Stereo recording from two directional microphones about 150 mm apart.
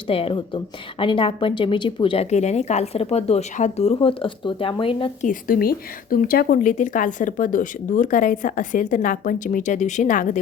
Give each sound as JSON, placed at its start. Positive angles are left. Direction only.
{"t": 0.1, "sound": "a woman's voice", "side_deg": 40}
{"t": 2.3, "sound": "speech", "side_deg": 50}
{"t": 5.2, "sound": "a woman's voice", "side_deg": 65}